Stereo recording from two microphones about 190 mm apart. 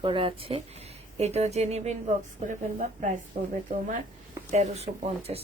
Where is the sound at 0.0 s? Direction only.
25° right (ahead or behind).